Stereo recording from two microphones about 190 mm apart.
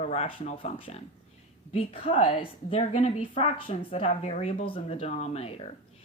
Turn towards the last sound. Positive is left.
turn(degrees=30)  # may be behind; listen again after turning